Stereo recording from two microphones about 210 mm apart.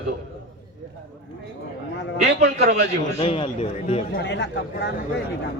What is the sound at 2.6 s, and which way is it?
Speech, 50° right (ahead or behind).